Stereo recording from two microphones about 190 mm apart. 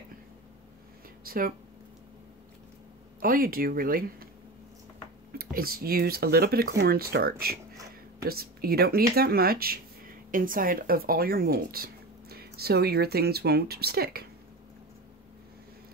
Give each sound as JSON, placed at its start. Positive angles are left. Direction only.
{"t": 1.2, "sound": "speech", "side_deg": -50}
{"t": 3.2, "sound": "speech", "side_deg": -50}
{"t": 5.3, "sound": "speech", "side_deg": -50}